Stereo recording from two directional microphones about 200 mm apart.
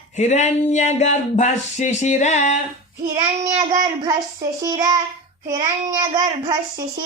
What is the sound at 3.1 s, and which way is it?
Child singing, 30° right (ahead or behind).